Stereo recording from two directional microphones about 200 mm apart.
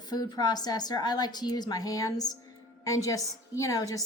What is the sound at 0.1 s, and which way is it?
A woman's voice, 20° left (ahead or behind).